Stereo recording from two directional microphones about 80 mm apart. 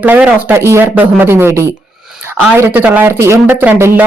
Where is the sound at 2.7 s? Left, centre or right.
Right.